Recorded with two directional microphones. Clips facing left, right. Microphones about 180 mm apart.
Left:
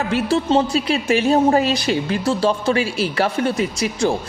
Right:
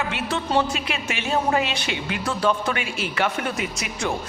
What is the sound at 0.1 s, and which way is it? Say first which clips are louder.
A woman's voice: left 7 dB; 35° left (ahead or behind).